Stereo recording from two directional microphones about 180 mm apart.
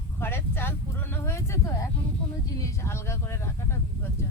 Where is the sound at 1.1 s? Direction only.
15° left (ahead or behind).